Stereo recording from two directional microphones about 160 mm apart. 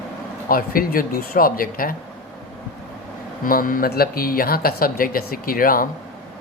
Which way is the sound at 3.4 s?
60° left (ahead or behind).